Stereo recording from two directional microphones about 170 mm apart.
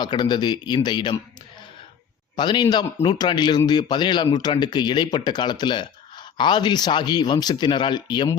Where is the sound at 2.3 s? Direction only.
25° left (ahead or behind).